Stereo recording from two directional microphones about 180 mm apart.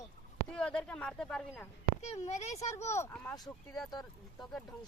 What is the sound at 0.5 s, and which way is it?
Speech, 5° left (ahead or behind).